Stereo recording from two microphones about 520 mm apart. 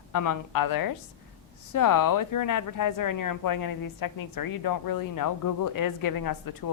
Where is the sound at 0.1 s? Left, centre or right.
Left.